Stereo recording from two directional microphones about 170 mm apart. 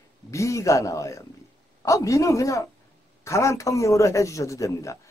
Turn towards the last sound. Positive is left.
turn(degrees=20)  # may be behind; listen again after turning